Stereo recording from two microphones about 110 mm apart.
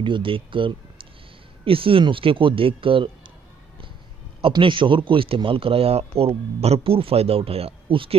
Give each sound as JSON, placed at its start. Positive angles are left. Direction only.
{"t": 0.0, "sound": "speech", "side_deg": -50}
{"t": 4.4, "sound": "speech", "side_deg": -50}